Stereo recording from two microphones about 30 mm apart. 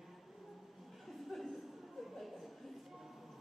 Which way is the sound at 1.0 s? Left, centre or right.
Centre.